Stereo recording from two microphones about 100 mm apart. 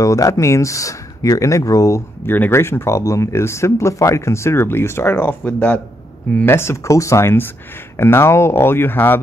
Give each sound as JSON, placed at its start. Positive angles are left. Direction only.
{"t": 0.0, "sound": "speech", "side_deg": 35}